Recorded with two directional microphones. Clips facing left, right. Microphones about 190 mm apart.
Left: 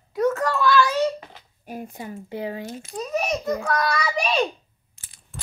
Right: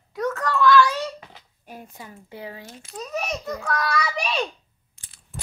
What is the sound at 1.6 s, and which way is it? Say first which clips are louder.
Speech: left 7 dB; 10° left (ahead or behind).